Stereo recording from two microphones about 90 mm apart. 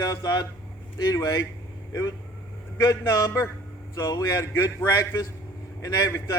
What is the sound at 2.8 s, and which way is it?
A man's voice, 35° left (ahead or behind).